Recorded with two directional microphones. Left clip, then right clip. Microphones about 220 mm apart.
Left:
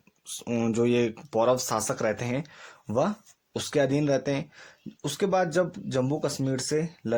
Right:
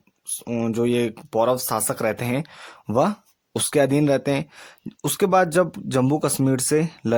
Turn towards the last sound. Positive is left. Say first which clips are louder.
# right 7 dB
turn(degrees=-40)  # may be behind; listen again after turning